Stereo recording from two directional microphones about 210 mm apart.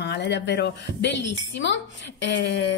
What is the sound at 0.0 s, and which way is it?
A woman's voice, 55° left (ahead or behind).